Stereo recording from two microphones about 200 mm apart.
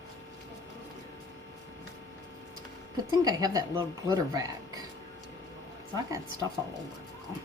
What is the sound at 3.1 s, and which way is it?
Speech, 20° right (ahead or behind).